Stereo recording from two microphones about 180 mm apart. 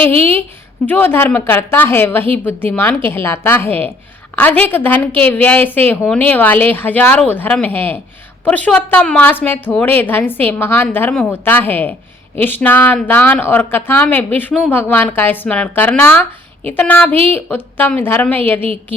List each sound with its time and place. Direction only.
0.9 s a woman's voice: 10° left (ahead or behind)